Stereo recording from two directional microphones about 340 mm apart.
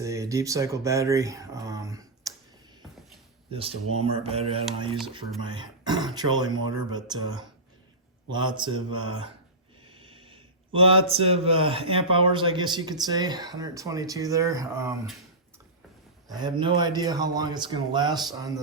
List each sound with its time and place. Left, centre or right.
0.0 s speech: centre
3.5 s a man's voice: centre
9.8 s a sound: centre
11.1 s a man's voice: centre
16.3 s a man's voice: centre